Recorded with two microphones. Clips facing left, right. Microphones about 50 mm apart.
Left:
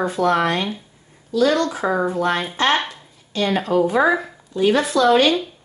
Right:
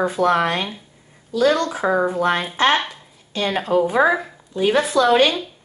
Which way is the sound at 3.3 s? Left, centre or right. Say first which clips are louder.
Even; centre.